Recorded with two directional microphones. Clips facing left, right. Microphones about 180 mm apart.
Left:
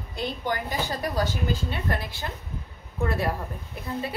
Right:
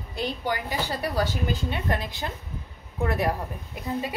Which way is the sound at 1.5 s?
20° right (ahead or behind).